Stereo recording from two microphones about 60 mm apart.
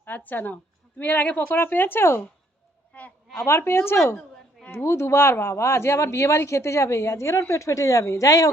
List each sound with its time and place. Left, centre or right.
0.0 s a woman's voice: left
1.5 s speech: left
2.9 s a sound: left
3.3 s speech: left